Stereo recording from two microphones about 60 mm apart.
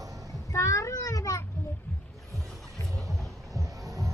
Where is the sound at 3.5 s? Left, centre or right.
Right.